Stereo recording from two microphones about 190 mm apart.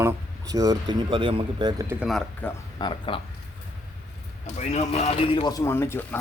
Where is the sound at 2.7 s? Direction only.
25° left (ahead or behind).